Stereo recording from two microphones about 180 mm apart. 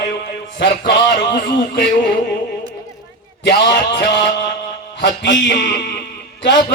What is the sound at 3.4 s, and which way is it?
Speech, 70° left (ahead or behind).